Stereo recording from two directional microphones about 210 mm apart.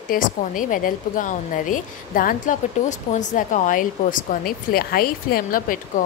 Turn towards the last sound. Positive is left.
turn(degrees=40)  # may be behind; listen again after turning